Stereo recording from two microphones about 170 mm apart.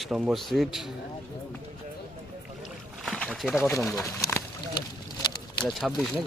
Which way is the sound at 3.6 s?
15° left (ahead or behind).